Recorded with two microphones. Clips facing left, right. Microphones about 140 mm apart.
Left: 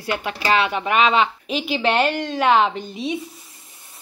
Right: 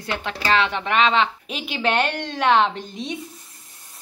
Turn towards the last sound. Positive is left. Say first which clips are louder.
# left 4 dB
turn(degrees=5)  # may be behind; listen again after turning